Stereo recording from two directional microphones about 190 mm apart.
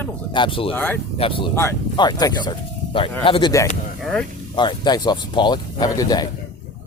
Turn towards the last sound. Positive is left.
turn(degrees=20)  # may be behind; listen again after turning